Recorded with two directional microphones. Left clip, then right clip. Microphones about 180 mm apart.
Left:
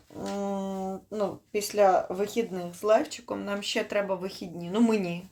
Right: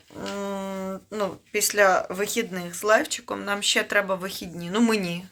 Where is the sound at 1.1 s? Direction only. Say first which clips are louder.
Right 3 dB; centre (ahead or behind).